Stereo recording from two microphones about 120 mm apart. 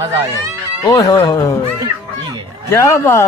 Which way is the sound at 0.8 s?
35° left (ahead or behind).